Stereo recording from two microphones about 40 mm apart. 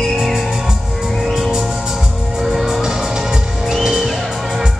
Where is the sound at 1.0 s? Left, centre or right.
Centre.